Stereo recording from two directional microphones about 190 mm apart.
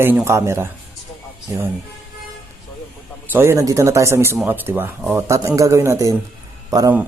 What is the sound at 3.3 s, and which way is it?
Speech, 15° right (ahead or behind).